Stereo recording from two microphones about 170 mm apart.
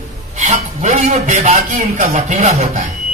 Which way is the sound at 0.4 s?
40° right (ahead or behind).